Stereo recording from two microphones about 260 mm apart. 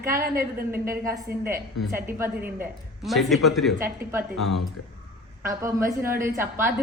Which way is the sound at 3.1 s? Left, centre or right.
Centre.